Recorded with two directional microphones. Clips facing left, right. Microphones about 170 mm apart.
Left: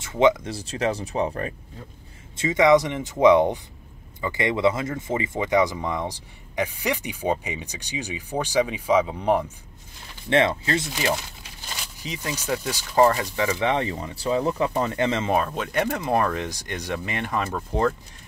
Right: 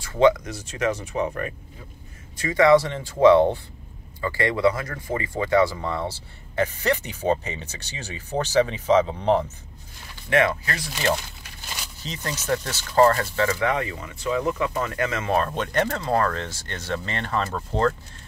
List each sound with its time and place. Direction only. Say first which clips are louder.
0.2 s speech: right 1 dB; 25° left (ahead or behind)
10.3 s speech: left 1 dB; 25° left (ahead or behind)
12.0 s speech: left 1 dB; 10° left (ahead or behind); by 15.3 s 25° left (ahead or behind)
15.3 s speech: right 1 dB; 5° left (ahead or behind)